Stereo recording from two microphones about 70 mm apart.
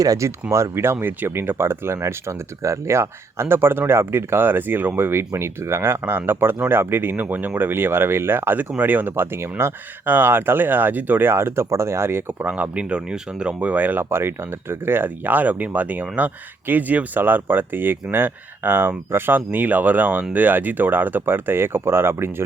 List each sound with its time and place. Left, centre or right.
0.0 s speech: right
0.5 s speech: right
12.5 s speech: right